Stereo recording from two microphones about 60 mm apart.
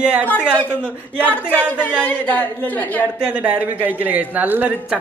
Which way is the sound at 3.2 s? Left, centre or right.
Right.